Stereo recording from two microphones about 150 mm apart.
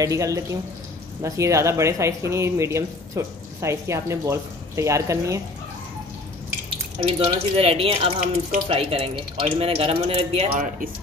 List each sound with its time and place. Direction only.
0.0 s speech: 20° right (ahead or behind)
7.0 s speech: 40° right (ahead or behind)